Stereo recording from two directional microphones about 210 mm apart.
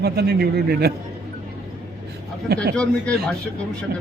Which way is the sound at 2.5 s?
50° right (ahead or behind).